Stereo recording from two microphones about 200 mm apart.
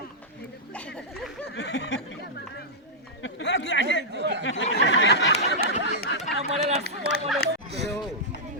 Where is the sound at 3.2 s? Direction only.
65° left (ahead or behind).